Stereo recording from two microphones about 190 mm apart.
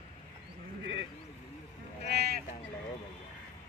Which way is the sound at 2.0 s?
60° right (ahead or behind).